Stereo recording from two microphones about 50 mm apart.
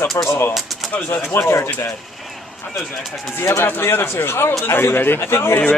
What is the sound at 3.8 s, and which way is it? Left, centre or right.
Speech, left.